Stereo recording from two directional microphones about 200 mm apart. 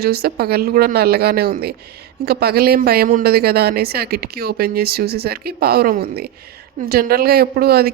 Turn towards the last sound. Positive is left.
turn(degrees=-50)  # may be behind; listen again after turning